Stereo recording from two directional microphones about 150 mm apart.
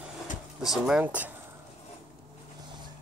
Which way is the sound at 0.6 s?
5° right (ahead or behind).